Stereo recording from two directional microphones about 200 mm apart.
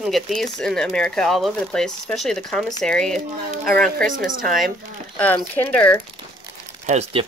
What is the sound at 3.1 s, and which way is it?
Speech, 45° right (ahead or behind).